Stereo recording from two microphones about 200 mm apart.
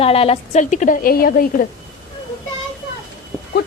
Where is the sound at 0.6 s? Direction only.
40° left (ahead or behind).